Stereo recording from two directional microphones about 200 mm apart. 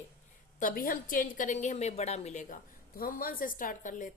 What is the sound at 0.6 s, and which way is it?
A woman's voice, 40° left (ahead or behind).